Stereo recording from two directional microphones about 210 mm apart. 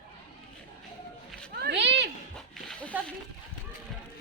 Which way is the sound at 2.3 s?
5° left (ahead or behind).